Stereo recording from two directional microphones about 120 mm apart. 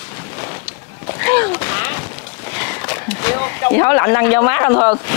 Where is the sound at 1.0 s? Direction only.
20° left (ahead or behind).